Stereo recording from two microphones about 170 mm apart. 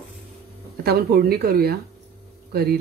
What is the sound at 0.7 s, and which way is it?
Speech, 65° right (ahead or behind).